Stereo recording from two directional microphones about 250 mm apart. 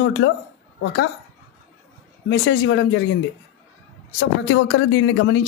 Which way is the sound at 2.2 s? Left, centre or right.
Left.